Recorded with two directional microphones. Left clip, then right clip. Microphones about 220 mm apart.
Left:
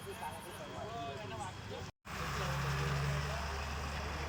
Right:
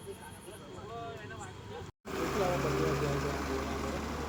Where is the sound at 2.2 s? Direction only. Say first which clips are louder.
Right 8 dB; 45° right (ahead or behind).